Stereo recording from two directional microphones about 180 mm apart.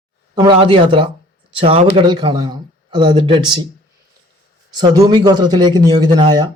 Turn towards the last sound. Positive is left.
turn(degrees=-25)  # may be behind; listen again after turning